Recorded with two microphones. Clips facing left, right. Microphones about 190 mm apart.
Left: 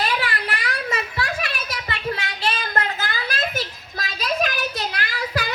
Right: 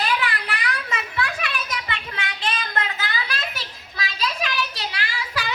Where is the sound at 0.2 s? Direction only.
40° left (ahead or behind).